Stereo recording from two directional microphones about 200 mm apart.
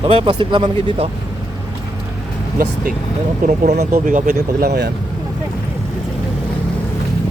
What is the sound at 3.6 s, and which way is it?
Speech, 35° right (ahead or behind).